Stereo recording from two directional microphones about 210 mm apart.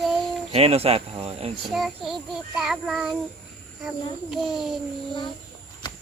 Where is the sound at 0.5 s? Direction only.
30° right (ahead or behind).